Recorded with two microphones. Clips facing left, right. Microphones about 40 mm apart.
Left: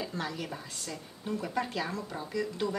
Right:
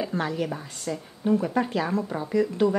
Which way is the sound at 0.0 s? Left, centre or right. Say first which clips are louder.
Right 8 dB; right.